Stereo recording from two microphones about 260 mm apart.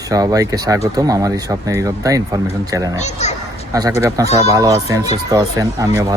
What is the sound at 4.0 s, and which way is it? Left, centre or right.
Speech, centre.